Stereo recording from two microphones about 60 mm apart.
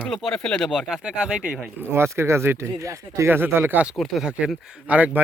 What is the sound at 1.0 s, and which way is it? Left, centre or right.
Speech, centre.